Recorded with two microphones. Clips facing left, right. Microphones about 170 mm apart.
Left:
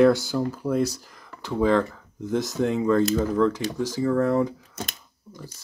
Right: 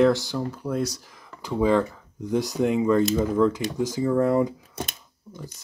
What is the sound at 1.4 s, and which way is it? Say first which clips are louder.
Speech: even; 10° right (ahead or behind).